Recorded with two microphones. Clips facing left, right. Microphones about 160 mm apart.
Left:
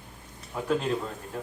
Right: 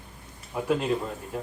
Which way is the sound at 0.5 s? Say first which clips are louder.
Right 2 dB; 5° right (ahead or behind).